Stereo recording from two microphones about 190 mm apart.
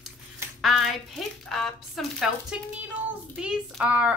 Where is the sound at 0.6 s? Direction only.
Centre (ahead or behind).